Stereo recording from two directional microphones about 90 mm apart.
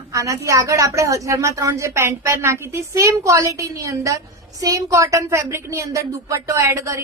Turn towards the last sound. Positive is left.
turn(degrees=-30)  # may be behind; listen again after turning